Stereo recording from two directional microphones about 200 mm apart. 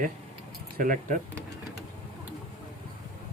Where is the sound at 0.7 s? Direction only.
40° right (ahead or behind).